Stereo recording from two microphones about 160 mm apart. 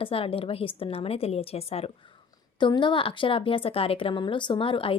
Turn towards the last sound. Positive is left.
turn(degrees=35)  # may be behind; listen again after turning